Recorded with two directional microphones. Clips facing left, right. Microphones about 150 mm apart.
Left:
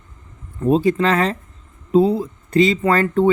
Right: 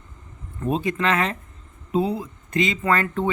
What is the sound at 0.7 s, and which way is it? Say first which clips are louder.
Speech: left 7 dB; 35° left (ahead or behind).